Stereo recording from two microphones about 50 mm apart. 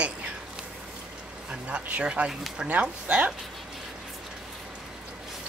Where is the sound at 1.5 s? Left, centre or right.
Right.